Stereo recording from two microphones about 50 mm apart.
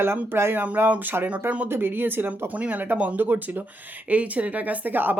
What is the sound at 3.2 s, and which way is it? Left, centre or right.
Speech, right.